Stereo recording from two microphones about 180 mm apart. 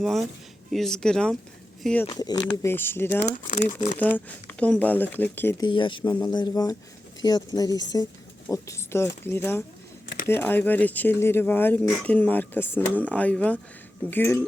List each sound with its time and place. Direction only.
0.0 s speech: centre (ahead or behind)
2.0 s speech: 20° left (ahead or behind)
3.2 s speech: 40° left (ahead or behind)
4.0 s speech: 10° left (ahead or behind)
5.6 s speech: 25° left (ahead or behind); by 14.4 s 10° left (ahead or behind)